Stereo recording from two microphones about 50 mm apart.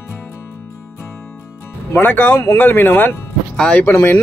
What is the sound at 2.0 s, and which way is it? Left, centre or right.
Speech, left.